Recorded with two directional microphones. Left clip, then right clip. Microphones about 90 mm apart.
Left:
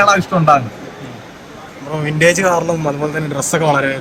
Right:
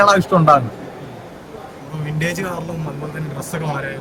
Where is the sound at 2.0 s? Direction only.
40° left (ahead or behind).